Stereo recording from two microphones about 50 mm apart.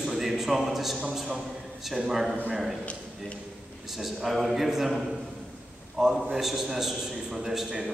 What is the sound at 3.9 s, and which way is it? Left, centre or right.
A man's voice, centre.